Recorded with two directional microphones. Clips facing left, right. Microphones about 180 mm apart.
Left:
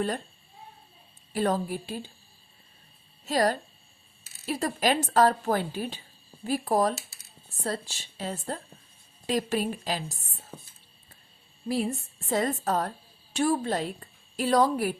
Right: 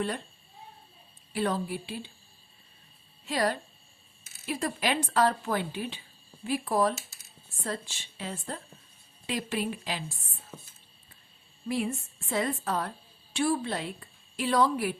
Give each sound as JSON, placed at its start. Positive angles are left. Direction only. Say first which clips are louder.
{"t": 1.3, "sound": "a woman's voice", "louder": "left 3 dB", "side_deg": 45}
{"t": 3.2, "sound": "speech", "louder": "left 4 dB", "side_deg": 40}
{"t": 10.5, "sound": "speech", "louder": "left 2 dB", "side_deg": 15}
{"t": 11.7, "sound": "a woman's voice", "louder": "left 2 dB", "side_deg": 35}